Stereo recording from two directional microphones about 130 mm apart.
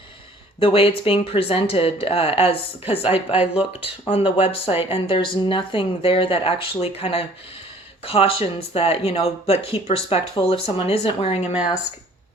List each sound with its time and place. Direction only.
0.6 s speech: 45° left (ahead or behind)